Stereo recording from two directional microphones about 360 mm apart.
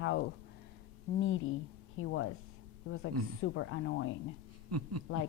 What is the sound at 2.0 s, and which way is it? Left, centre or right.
A woman's voice, left.